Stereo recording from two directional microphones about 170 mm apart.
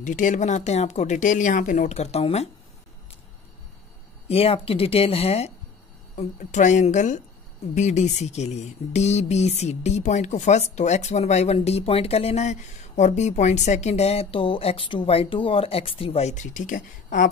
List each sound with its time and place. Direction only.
0.0 s speech: 50° left (ahead or behind)
4.3 s speech: 35° left (ahead or behind); by 17.3 s 50° left (ahead or behind)